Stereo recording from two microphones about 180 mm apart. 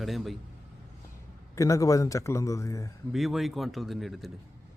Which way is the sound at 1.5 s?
15° left (ahead or behind).